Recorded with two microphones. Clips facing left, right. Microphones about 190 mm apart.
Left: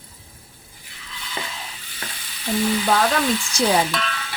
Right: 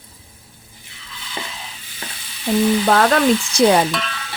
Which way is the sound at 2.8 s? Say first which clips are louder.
Right 5 dB; 60° right (ahead or behind).